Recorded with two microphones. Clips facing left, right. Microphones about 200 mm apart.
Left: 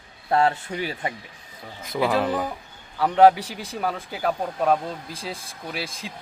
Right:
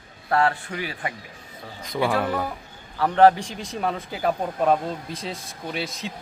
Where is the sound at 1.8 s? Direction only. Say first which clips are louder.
Left 1 dB; 5° left (ahead or behind).